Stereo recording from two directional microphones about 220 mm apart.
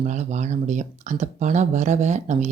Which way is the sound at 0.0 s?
30° right (ahead or behind).